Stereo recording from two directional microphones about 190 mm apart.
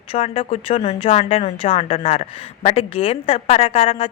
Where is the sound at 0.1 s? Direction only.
30° left (ahead or behind).